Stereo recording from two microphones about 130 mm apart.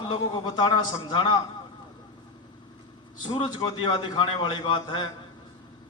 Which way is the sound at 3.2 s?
35° left (ahead or behind).